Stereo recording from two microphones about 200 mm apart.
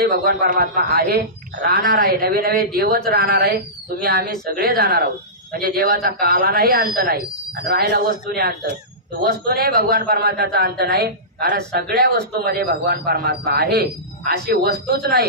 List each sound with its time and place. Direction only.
0.0 s a man's voice: 50° right (ahead or behind)